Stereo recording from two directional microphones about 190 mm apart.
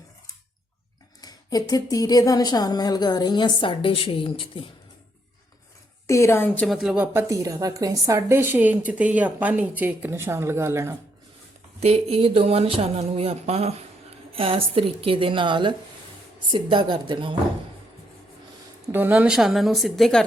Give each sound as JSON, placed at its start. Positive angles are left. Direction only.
{"t": 1.2, "sound": "a woman's voice", "side_deg": 20}
{"t": 6.1, "sound": "a woman's voice", "side_deg": 15}
{"t": 6.7, "sound": "speech", "side_deg": 0}
{"t": 11.8, "sound": "a woman's voice", "side_deg": -35}
{"t": 18.9, "sound": "a woman's voice", "side_deg": -10}